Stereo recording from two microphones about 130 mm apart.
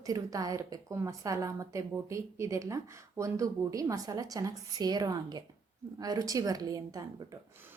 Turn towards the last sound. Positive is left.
turn(degrees=-30)  # may be behind; listen again after turning